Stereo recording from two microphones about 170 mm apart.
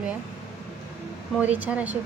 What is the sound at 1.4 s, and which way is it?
Speech, 10° right (ahead or behind).